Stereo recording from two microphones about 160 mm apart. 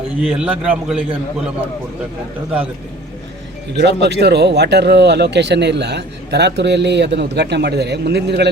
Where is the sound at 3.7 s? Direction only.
90° right.